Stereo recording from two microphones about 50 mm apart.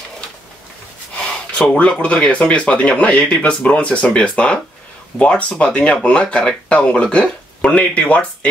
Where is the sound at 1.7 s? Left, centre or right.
Left.